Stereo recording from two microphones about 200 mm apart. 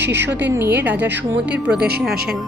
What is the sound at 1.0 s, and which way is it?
Speech, 60° right (ahead or behind).